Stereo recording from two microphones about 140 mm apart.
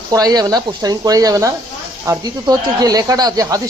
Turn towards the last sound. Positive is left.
turn(degrees=-25)  # may be behind; listen again after turning